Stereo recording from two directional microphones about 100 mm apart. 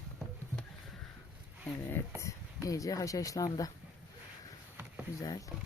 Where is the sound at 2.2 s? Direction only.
35° left (ahead or behind).